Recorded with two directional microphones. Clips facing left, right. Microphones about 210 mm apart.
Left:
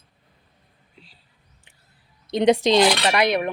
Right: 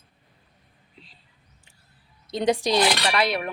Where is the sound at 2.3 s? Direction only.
20° left (ahead or behind).